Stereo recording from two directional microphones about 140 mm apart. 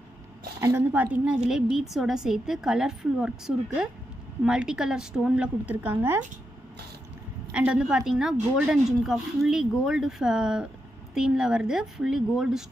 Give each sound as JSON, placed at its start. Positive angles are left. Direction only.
{"t": 0.6, "sound": "a woman's voice", "side_deg": -20}
{"t": 1.5, "sound": "a woman's voice", "side_deg": -5}
{"t": 7.5, "sound": "a woman's voice", "side_deg": -5}